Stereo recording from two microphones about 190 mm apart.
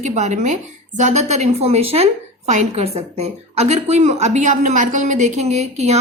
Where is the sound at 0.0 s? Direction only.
40° right (ahead or behind).